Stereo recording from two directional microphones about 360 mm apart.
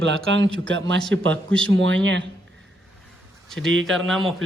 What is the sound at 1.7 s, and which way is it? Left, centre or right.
Speech, right.